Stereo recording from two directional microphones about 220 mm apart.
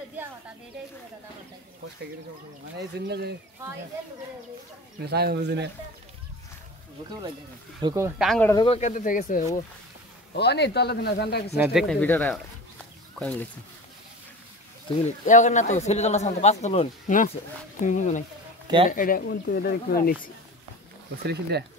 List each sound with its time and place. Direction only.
3.1 s speech: 45° right (ahead or behind)
5.0 s speech: 45° right (ahead or behind)
7.8 s speech: 15° right (ahead or behind)
8.2 s speech: centre (ahead or behind)
8.5 s speech: 20° left (ahead or behind)
8.7 s speech: 35° left (ahead or behind)
10.3 s speech: 50° left (ahead or behind)
11.5 s speech: 10° right (ahead or behind)
11.9 s speech: 5° left (ahead or behind)
15.0 s speech: 35° left (ahead or behind)
21.2 s speech: 50° right (ahead or behind)